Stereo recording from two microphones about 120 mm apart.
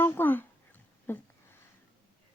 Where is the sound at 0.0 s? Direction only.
15° left (ahead or behind).